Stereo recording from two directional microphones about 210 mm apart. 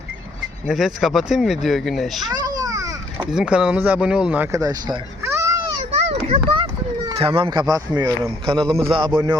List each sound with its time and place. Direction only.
0.7 s speech: centre (ahead or behind)
2.2 s children playing: 20° right (ahead or behind)
3.3 s speech: 5° right (ahead or behind)
6.0 s a sound: 30° right (ahead or behind)
7.7 s speech: 15° right (ahead or behind)